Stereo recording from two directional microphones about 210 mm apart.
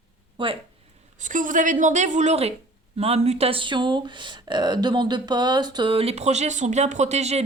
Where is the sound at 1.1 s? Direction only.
35° right (ahead or behind).